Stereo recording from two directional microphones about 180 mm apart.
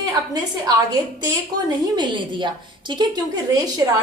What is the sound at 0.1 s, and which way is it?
Speech, 20° right (ahead or behind).